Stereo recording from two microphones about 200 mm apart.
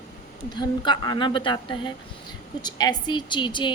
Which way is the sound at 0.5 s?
20° left (ahead or behind).